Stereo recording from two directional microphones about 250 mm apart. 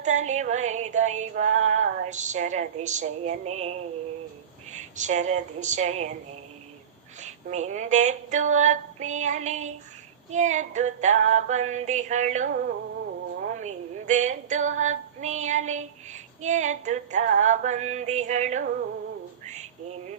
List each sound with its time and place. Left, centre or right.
0.0 s female singing: right
4.7 s female singing: right
7.2 s female singing: right
19.5 s a sound: right